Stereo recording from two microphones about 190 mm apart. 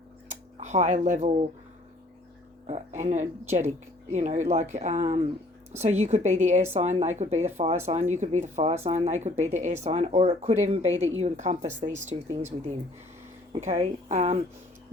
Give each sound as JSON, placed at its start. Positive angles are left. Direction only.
{"t": 0.6, "sound": "speech", "side_deg": -40}
{"t": 2.6, "sound": "speech", "side_deg": -40}
{"t": 13.5, "sound": "speech", "side_deg": -35}